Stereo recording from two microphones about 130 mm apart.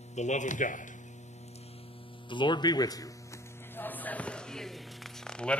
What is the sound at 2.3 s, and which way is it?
Speech, 35° left (ahead or behind).